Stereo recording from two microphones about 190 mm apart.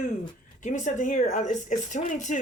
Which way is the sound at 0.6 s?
40° left (ahead or behind).